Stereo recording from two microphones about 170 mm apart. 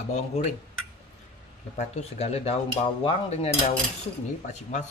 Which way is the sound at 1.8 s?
40° left (ahead or behind).